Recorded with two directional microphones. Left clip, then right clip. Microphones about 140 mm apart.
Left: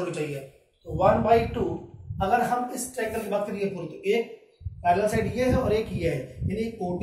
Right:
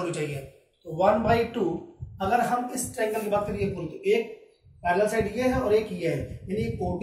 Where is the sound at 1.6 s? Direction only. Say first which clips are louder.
Right 2 dB; 40° right (ahead or behind).